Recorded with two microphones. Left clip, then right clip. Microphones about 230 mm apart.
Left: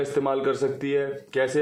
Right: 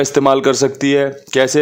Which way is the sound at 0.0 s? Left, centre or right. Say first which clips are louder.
Right 12 dB; right.